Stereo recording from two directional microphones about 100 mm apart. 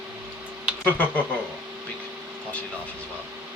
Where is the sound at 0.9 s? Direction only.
15° left (ahead or behind).